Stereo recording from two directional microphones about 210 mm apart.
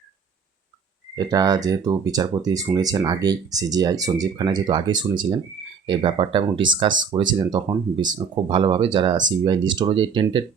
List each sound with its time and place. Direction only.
1.1 s speech: 20° right (ahead or behind)